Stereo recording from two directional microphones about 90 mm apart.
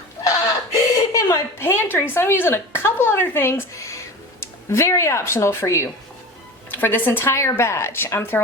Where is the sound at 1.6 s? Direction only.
25° left (ahead or behind).